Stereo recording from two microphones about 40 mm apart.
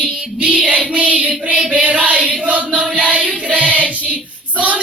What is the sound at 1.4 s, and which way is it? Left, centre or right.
Music, right.